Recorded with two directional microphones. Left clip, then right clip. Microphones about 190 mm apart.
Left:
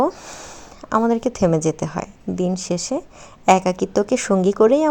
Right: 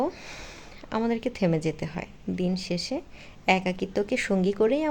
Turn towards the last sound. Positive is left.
turn(degrees=25)  # may be behind; listen again after turning